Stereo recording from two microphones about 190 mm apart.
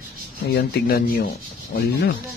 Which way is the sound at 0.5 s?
55° left (ahead or behind).